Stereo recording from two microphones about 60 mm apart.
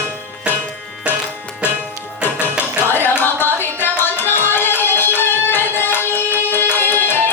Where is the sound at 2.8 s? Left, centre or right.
Left.